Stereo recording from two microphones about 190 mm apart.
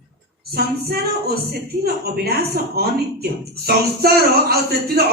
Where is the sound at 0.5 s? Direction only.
55° right (ahead or behind).